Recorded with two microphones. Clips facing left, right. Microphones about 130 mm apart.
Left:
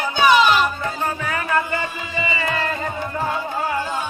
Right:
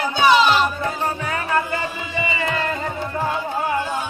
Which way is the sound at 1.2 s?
25° right (ahead or behind).